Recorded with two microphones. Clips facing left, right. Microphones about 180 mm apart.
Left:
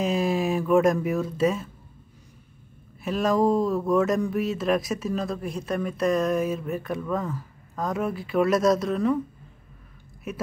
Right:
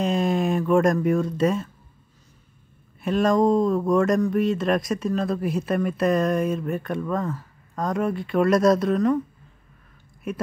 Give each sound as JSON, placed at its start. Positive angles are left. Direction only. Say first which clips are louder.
{"t": 0.0, "sound": "speech", "louder": "right 2 dB", "side_deg": 5}
{"t": 3.0, "sound": "speech", "louder": "right 3 dB", "side_deg": 0}
{"t": 10.3, "sound": "speech", "louder": "right 4 dB", "side_deg": 5}